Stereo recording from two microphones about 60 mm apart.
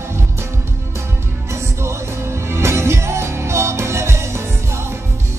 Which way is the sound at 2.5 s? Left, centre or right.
Right.